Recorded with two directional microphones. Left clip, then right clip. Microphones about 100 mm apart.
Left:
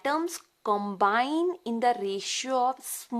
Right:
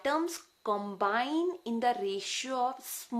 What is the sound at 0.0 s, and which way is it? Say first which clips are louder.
Speech: left 2 dB; 35° left (ahead or behind).